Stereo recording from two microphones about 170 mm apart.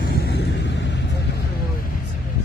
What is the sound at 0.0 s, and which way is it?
Vehicle, 75° left (ahead or behind).